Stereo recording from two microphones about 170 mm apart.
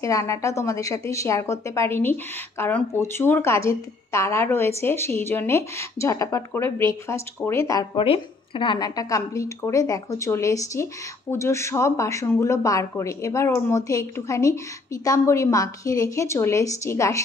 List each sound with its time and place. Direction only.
0.0 s a woman's voice: 20° left (ahead or behind)
8.0 s a woman's voice: 30° left (ahead or behind)